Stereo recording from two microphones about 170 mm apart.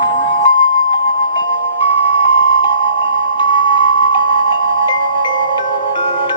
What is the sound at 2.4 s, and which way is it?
Music, 30° left (ahead or behind).